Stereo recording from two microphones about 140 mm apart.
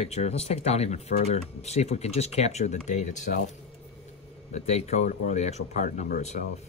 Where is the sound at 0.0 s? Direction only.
50° left (ahead or behind).